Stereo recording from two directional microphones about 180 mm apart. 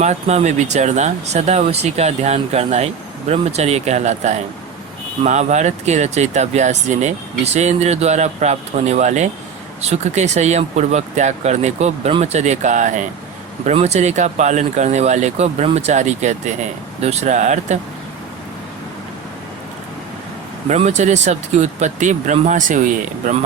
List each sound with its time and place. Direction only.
0.0 s speech: 40° right (ahead or behind)
20.7 s speech: 40° right (ahead or behind)